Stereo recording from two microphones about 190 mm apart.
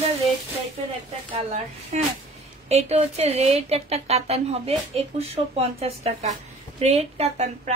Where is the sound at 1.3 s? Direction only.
35° right (ahead or behind).